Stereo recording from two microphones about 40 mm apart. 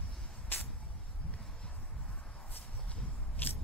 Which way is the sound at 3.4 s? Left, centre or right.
Left.